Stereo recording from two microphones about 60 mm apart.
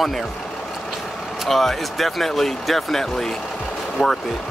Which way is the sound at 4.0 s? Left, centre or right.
Centre.